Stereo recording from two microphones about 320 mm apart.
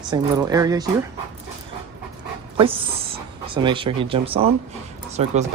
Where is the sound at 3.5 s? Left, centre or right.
Centre.